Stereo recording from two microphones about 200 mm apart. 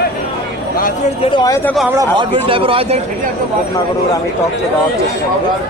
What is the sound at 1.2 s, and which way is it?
Speech, 20° left (ahead or behind).